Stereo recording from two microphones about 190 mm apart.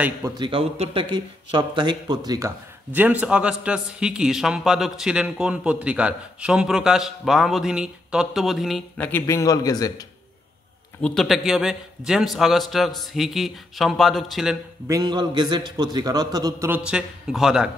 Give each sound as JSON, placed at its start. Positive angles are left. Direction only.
{"t": 0.4, "sound": "speech", "side_deg": -25}
{"t": 8.9, "sound": "a man's voice", "side_deg": 10}
{"t": 11.0, "sound": "speech", "side_deg": 5}
{"t": 14.9, "sound": "a man's voice", "side_deg": -20}